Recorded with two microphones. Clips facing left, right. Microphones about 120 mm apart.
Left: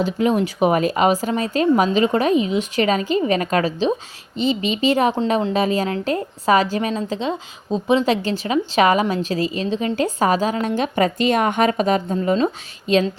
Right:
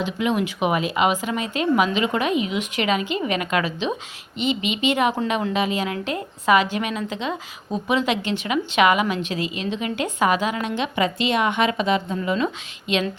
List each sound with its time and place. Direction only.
0.0 s a woman's voice: 40° left (ahead or behind)